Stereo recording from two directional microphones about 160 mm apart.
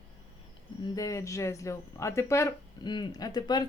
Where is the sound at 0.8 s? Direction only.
20° left (ahead or behind).